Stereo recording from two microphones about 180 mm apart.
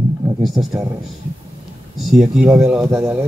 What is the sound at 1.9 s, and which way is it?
Speech, centre (ahead or behind).